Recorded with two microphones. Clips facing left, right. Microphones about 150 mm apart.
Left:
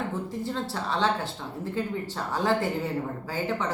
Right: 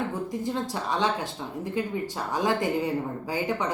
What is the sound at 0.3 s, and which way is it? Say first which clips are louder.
Speech: right 2 dB; 15° right (ahead or behind).